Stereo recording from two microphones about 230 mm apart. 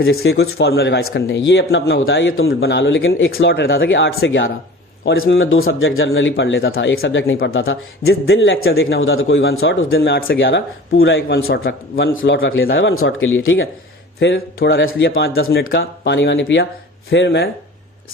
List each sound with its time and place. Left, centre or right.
0.0 s speech: left
2.5 s a man's voice: left
8.8 s a man's voice: left